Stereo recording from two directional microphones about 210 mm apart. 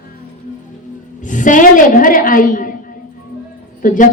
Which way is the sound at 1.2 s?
35° left (ahead or behind).